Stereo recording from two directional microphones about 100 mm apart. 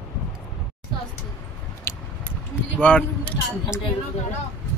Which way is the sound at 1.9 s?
25° left (ahead or behind).